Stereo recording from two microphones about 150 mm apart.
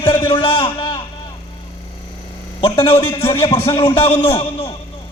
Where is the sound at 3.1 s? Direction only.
25° left (ahead or behind).